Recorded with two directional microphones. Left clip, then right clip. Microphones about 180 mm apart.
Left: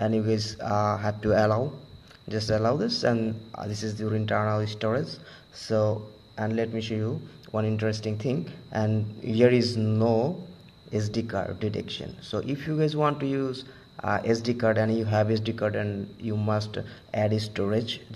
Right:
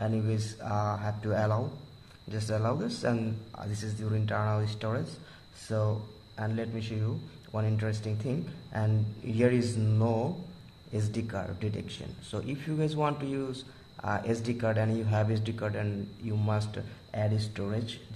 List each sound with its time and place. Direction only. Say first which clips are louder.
0.0 s speech: left 8 dB; 30° left (ahead or behind)